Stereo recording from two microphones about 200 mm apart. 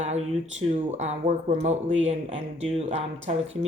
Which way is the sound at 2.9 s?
35° right (ahead or behind).